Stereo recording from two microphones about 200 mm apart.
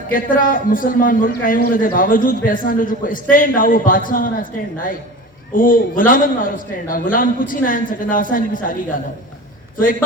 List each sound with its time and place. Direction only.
0.1 s a man's voice: 45° left (ahead or behind)